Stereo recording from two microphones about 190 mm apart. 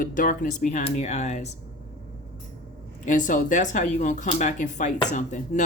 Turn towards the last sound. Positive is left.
turn(degrees=40)  # may be behind; listen again after turning